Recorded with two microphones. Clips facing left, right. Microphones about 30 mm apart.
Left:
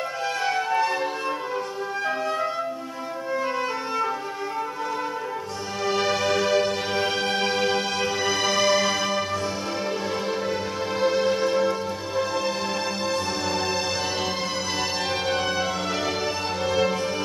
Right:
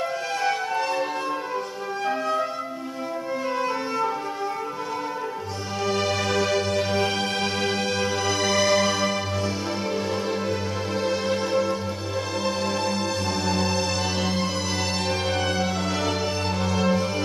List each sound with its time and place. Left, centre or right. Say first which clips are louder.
0.4 s music: left 2 dB; centre
2.0 s music: right 3 dB; centre
3.5 s music: right 1 dB; centre
5.9 s music: left 2 dB; centre
11.0 s music: left 4 dB; centre
15.2 s music: even; centre